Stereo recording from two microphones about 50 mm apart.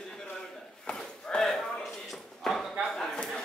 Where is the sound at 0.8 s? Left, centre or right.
Centre.